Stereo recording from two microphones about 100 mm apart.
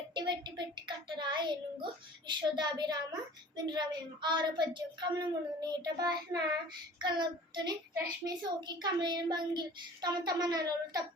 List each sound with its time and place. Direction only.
0.1 s a child's voice: 50° right (ahead or behind)